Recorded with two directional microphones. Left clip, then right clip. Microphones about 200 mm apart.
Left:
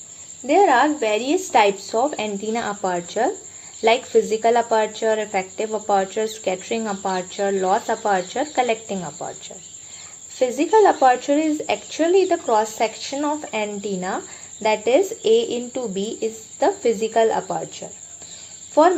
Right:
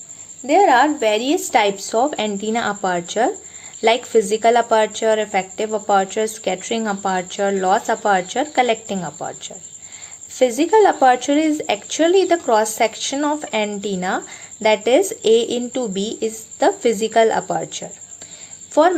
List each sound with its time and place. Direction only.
0.4 s a woman's voice: 15° right (ahead or behind)
10.3 s a woman's voice: 25° right (ahead or behind)